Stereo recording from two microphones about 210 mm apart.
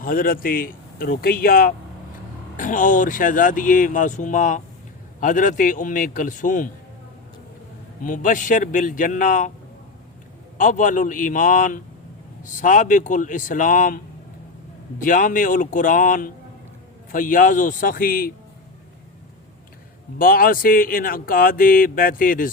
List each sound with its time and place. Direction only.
0.0 s speech: 40° left (ahead or behind)
8.0 s speech: 40° left (ahead or behind)
10.6 s speech: 40° left (ahead or behind)
15.0 s speech: 40° left (ahead or behind)
20.1 s speech: 45° left (ahead or behind)